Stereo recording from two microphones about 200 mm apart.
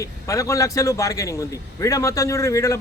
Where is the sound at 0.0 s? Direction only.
15° left (ahead or behind).